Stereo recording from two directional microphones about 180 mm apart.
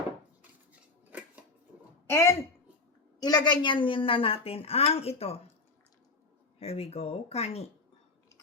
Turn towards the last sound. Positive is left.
turn(degrees=35)  # may be behind; listen again after turning